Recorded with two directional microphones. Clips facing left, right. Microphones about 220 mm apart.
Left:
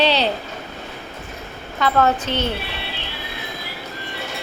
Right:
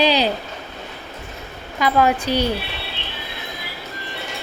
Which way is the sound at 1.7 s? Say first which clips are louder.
Right 1 dB; 10° right (ahead or behind).